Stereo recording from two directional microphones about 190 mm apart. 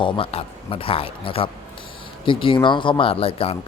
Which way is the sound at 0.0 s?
30° left (ahead or behind).